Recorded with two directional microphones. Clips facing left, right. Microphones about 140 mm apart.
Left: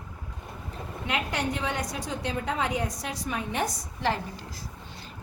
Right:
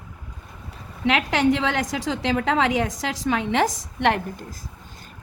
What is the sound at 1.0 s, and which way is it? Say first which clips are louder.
A woman's voice: right 10 dB; 90° right.